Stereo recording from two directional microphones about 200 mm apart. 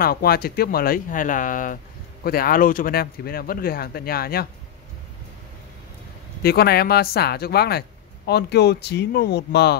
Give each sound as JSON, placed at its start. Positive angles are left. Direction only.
{"t": 0.0, "sound": "speech", "side_deg": 50}
{"t": 6.4, "sound": "speech", "side_deg": 50}